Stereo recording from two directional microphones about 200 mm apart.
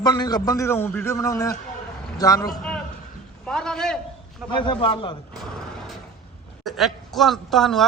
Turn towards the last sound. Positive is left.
turn(degrees=0)  # may be behind; listen again after turning